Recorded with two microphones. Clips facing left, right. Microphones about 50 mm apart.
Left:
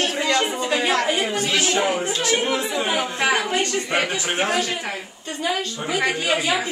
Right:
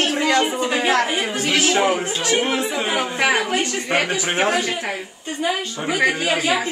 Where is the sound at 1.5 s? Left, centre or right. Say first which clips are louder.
Right 5 dB; right.